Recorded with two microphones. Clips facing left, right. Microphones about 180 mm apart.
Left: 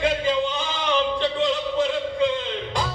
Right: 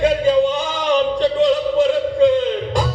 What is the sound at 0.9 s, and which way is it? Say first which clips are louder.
Music: right 7 dB; 40° right (ahead or behind).